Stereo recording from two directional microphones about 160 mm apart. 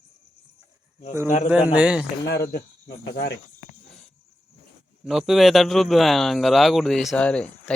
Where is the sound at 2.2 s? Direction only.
85° left.